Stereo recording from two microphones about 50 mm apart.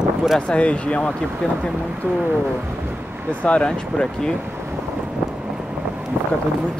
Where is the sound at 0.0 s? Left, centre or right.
Centre.